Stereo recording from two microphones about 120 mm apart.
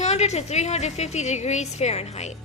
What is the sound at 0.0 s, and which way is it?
A woman's voice, 65° left (ahead or behind).